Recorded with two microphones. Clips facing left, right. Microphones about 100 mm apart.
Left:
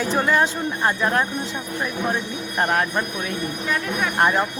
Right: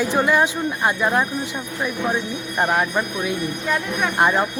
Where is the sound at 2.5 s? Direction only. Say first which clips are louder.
Right 1 dB; 10° right (ahead or behind).